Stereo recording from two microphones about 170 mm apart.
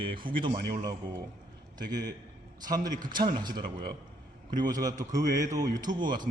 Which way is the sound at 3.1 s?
25° right (ahead or behind).